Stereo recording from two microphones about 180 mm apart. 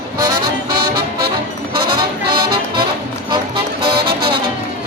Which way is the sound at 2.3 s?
55° right (ahead or behind).